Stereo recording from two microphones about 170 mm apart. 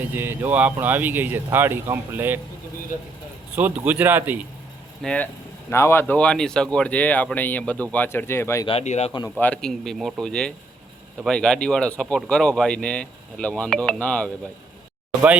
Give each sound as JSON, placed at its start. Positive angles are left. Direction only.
{"t": 0.0, "sound": "speech", "side_deg": -10}
{"t": 3.5, "sound": "speech", "side_deg": -10}
{"t": 5.0, "sound": "speech", "side_deg": 10}
{"t": 8.6, "sound": "speech", "side_deg": 40}
{"t": 9.4, "sound": "speech", "side_deg": 5}